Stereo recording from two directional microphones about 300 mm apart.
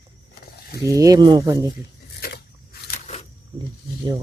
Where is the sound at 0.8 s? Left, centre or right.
Centre.